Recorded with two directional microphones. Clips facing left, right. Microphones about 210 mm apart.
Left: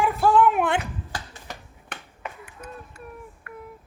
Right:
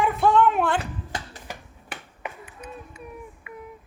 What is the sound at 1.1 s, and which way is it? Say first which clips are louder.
Finger snapping: right 3 dB; 20° right (ahead or behind).